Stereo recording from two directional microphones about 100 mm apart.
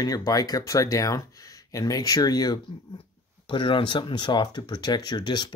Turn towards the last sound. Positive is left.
turn(degrees=45)  # may be behind; listen again after turning